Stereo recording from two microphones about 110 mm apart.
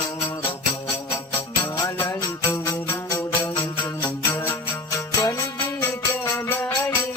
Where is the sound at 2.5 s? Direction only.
25° left (ahead or behind).